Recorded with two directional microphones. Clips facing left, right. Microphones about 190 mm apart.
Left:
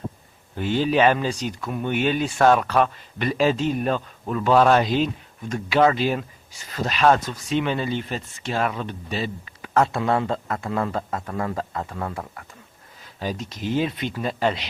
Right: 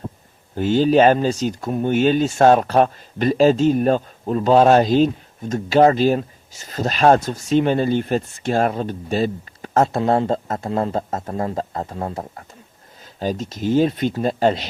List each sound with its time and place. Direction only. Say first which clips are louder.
0.5 s speech: right 6 dB; 40° right (ahead or behind)
4.8 s speech: right 6 dB; 40° right (ahead or behind)